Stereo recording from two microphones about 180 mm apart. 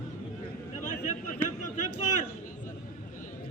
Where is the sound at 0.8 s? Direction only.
45° left (ahead or behind).